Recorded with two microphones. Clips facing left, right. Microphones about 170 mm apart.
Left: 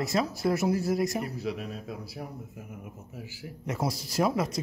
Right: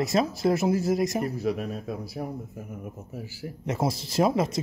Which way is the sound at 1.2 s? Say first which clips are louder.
Right 5 dB; 45° right (ahead or behind).